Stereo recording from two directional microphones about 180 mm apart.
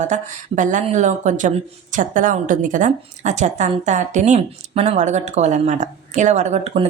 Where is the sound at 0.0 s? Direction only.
40° right (ahead or behind).